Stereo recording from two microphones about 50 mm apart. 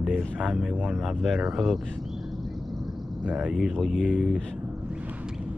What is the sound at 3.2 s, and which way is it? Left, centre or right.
Speech, centre.